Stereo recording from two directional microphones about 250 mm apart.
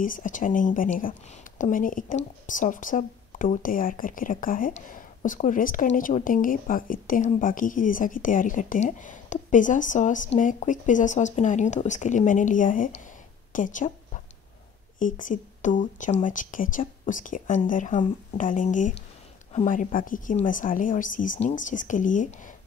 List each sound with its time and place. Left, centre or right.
0.0 s speech: left
13.5 s a sound: left
15.0 s speech: left